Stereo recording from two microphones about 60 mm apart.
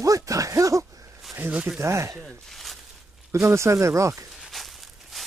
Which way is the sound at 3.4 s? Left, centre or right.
Right.